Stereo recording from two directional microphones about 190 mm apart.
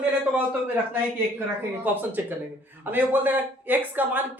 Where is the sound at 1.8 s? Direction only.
10° right (ahead or behind).